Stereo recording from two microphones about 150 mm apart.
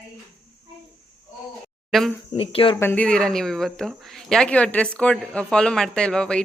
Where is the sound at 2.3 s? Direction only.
40° left (ahead or behind).